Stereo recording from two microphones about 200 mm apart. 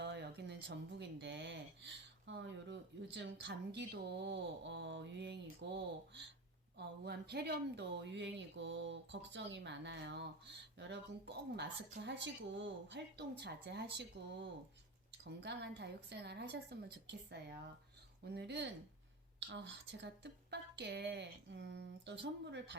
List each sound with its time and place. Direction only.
0.0 s speech: 60° right (ahead or behind)